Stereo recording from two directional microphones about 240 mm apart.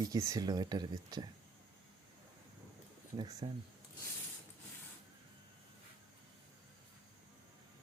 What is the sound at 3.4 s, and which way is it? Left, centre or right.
Speech, centre.